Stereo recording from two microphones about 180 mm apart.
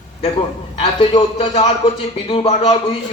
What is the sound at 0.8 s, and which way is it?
A man's voice, 30° left (ahead or behind).